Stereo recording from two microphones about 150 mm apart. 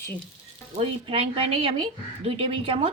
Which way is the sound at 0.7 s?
40° right (ahead or behind).